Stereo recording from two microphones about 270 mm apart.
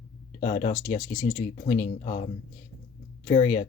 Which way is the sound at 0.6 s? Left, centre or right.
Centre.